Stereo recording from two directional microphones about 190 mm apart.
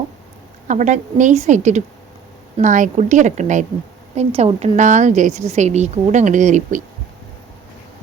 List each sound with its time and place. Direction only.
0.7 s a woman's voice: 40° right (ahead or behind)